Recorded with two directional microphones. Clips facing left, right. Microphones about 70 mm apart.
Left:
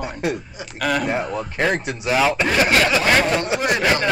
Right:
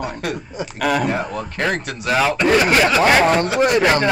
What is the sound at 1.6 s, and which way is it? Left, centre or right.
Speech, centre.